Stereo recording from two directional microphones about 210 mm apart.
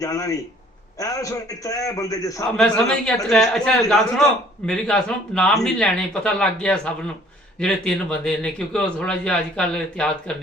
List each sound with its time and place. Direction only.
0.0 s a man's voice: 15° left (ahead or behind)
2.6 s a man's voice: 5° left (ahead or behind)